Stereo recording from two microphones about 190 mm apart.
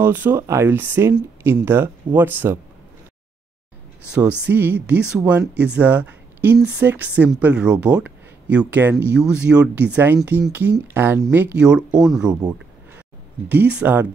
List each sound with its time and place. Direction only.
0.0 s a woman's voice: 10° right (ahead or behind)
4.1 s a woman's voice: 5° right (ahead or behind)
13.5 s a woman's voice: 10° right (ahead or behind)